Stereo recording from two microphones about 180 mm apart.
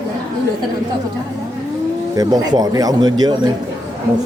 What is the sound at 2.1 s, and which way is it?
Speech, 20° right (ahead or behind).